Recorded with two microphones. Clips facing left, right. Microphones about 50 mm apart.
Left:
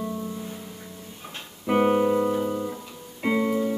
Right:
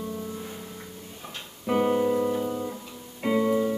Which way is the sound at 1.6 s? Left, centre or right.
Left.